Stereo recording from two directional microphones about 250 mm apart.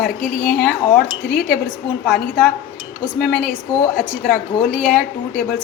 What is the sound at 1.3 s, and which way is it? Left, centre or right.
Speech, left.